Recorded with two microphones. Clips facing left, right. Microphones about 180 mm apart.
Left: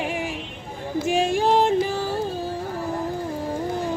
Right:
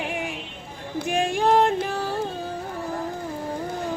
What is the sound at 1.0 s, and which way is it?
Female singing, centre (ahead or behind).